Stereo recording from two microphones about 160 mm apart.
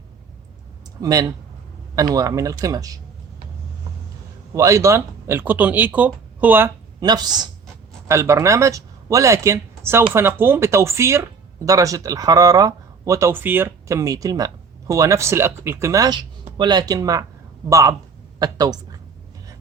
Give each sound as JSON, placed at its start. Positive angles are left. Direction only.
{"t": 1.0, "sound": "speech", "side_deg": -20}
{"t": 4.5, "sound": "speech", "side_deg": -20}
{"t": 7.0, "sound": "speech", "side_deg": -25}